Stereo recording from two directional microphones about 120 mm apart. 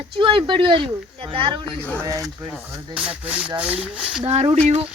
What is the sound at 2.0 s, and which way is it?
Speech, 30° right (ahead or behind).